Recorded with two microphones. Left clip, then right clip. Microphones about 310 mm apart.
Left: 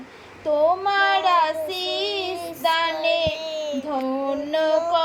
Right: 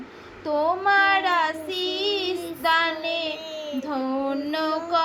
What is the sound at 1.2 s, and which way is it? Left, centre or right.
Child singing, centre.